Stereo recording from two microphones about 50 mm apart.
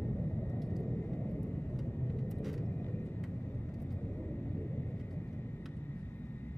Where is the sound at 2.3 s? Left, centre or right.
Centre.